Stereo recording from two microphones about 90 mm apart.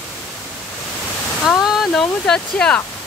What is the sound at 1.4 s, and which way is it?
Speech, centre (ahead or behind).